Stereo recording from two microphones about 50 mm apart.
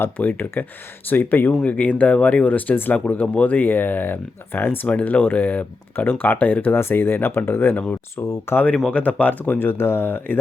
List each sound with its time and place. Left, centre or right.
0.2 s speech: left
1.7 s speech: left
6.7 s speech: left
8.1 s speech: left
8.9 s speech: left
9.6 s speech: left
10.0 s speech: left